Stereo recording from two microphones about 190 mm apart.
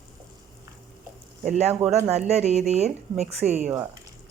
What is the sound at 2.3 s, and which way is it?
A woman's voice, 35° right (ahead or behind).